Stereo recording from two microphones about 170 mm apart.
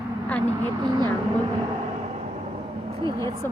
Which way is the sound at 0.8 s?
25° right (ahead or behind).